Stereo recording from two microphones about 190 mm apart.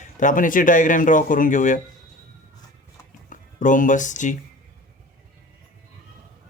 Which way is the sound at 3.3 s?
45° left (ahead or behind).